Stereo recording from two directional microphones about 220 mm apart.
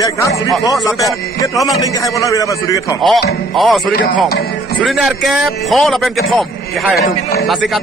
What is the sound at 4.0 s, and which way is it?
Speech, 45° left (ahead or behind).